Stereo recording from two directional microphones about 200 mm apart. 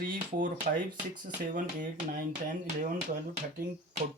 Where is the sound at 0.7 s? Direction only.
40° right (ahead or behind).